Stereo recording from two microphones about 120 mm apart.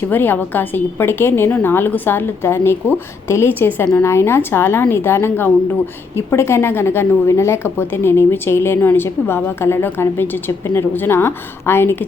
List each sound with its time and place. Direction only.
0.1 s a woman's voice: 15° left (ahead or behind)